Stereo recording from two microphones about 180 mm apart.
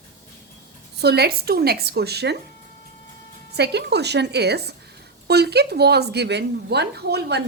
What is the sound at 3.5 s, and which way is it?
A woman's voice, 65° right (ahead or behind).